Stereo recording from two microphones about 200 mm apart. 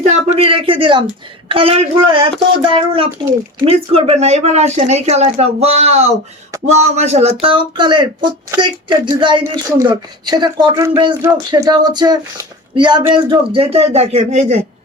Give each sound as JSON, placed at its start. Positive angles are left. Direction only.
{"t": 0.0, "sound": "speech", "side_deg": -30}